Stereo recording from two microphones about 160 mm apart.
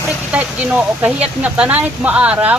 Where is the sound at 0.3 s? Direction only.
10° right (ahead or behind).